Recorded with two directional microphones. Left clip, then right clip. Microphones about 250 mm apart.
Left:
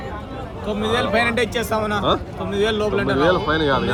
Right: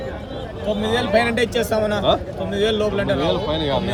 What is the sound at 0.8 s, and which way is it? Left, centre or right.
Speech, centre.